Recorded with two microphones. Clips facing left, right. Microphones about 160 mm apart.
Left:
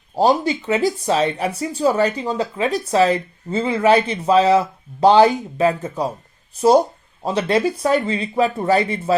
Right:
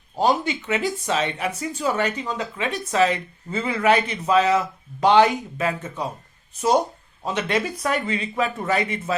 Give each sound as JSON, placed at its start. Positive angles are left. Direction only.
{"t": 0.2, "sound": "speech", "side_deg": 35}